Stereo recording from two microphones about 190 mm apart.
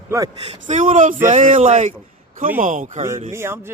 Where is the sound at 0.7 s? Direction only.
40° right (ahead or behind).